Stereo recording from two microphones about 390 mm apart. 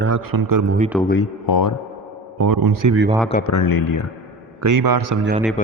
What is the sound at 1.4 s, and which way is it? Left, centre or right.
Speech, left.